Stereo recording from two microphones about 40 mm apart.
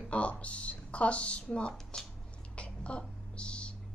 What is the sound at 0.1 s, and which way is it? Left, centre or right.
Speech, left.